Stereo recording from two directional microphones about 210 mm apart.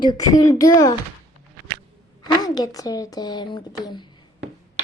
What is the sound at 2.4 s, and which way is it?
Speech, 20° left (ahead or behind).